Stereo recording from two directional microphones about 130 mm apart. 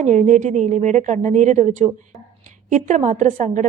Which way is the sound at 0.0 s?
70° right (ahead or behind).